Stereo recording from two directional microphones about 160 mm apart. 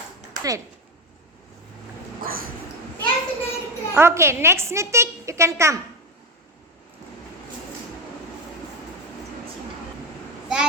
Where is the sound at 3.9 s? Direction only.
15° right (ahead or behind).